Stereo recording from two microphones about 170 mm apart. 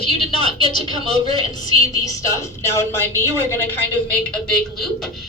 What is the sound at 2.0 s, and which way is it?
A woman's voice, 20° left (ahead or behind).